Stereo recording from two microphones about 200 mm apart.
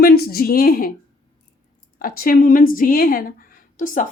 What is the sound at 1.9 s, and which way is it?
A woman's voice, 45° left (ahead or behind).